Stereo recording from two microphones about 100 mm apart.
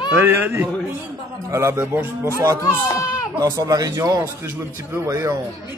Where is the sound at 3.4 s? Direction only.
35° right (ahead or behind).